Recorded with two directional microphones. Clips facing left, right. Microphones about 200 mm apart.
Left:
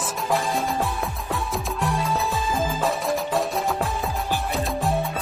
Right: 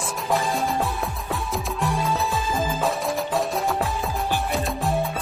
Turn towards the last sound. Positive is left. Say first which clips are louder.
# even
turn(degrees=0)  # may be behind; listen again after turning